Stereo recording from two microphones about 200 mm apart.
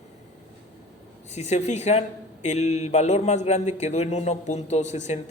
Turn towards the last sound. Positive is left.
turn(degrees=35)  # may be behind; listen again after turning